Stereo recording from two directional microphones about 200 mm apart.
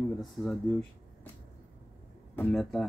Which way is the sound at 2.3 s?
5° left (ahead or behind).